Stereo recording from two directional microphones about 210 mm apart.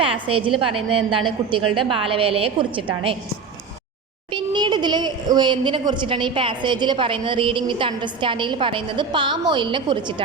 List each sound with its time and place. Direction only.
0.0 s a woman's voice: 25° right (ahead or behind)
4.3 s a child's voice: 20° right (ahead or behind)